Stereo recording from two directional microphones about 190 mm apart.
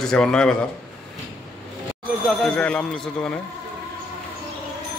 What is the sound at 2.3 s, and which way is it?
A man's voice, 5° left (ahead or behind).